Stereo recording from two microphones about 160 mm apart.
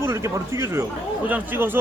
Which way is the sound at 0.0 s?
15° right (ahead or behind).